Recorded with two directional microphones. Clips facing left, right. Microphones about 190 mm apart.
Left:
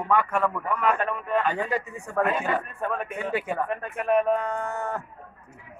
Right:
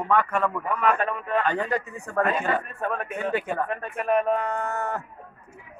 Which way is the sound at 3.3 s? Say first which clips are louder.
Even; 5° left (ahead or behind).